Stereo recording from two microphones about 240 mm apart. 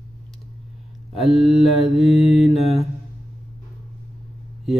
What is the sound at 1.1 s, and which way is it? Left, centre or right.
Mantra, centre.